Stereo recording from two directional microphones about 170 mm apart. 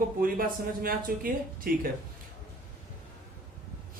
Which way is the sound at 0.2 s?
55° right (ahead or behind).